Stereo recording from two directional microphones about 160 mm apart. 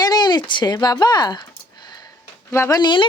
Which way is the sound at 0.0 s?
25° left (ahead or behind).